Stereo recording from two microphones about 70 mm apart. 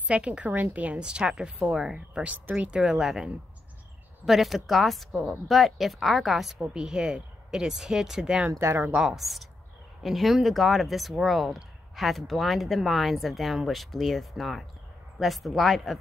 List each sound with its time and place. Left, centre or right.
0.1 s a woman's voice: centre
2.2 s a woman's voice: right; by 3.3 s centre
4.3 s a woman's voice: centre
8.5 s speech: right
8.9 s speech: centre